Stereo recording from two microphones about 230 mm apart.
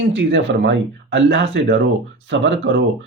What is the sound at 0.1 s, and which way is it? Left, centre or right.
Speech, right.